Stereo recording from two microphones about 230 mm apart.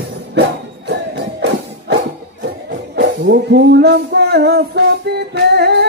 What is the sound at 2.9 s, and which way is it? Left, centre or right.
Music, right.